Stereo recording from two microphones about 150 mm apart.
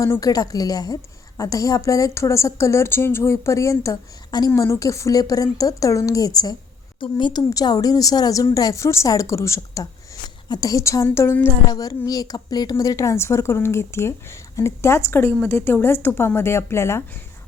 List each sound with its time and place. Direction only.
0.0 s a woman's voice: 20° left (ahead or behind)